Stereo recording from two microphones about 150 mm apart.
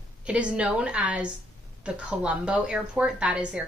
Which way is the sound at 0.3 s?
5° right (ahead or behind).